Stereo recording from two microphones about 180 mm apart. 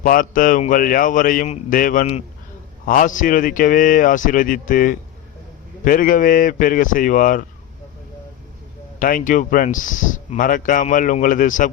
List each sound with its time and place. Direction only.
0.0 s speech: 50° left (ahead or behind)
9.0 s speech: 50° left (ahead or behind)